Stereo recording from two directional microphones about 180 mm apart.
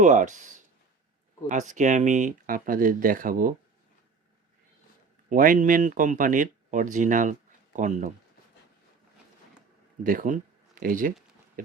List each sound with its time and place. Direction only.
0.0 s speech: 45° right (ahead or behind)
5.3 s speech: 50° right (ahead or behind)
10.0 s speech: 50° right (ahead or behind)